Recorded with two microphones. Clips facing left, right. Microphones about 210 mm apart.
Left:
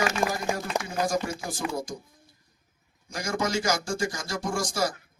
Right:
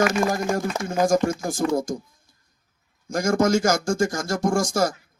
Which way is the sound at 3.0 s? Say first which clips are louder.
Right 9 dB; 45° right (ahead or behind).